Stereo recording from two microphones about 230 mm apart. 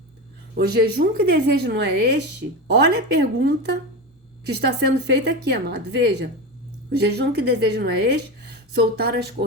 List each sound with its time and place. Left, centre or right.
0.5 s speech: right